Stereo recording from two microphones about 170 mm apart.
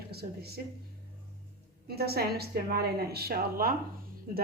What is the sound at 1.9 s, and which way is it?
A woman's voice, 70° right (ahead or behind).